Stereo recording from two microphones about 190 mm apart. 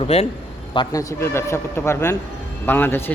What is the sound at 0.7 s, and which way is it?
A man's voice, 20° left (ahead or behind).